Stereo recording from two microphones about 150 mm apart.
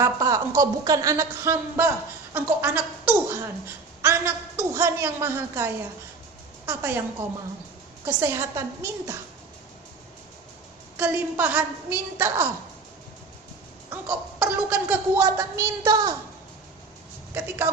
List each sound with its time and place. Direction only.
0.0 s a woman's voice: 20° right (ahead or behind)
8.0 s speech: 20° right (ahead or behind)
10.9 s a woman's voice: 15° right (ahead or behind)
13.9 s a sound: 10° right (ahead or behind)
15.2 s speech: 20° right (ahead or behind)